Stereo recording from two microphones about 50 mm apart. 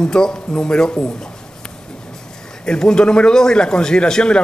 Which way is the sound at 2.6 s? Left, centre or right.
Centre.